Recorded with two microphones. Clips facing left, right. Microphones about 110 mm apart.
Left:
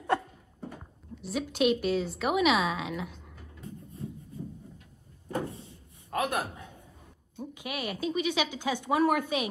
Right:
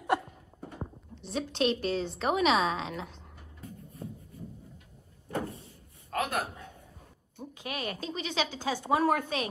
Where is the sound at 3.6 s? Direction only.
30° left (ahead or behind).